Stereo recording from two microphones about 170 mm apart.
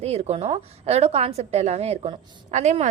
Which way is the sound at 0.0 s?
40° right (ahead or behind).